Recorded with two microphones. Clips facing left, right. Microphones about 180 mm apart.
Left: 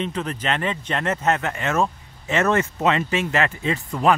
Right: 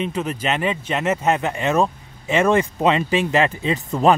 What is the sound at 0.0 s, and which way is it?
Speech, 10° right (ahead or behind).